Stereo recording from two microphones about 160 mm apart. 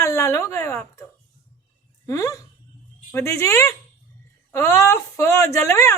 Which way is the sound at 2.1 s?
20° left (ahead or behind).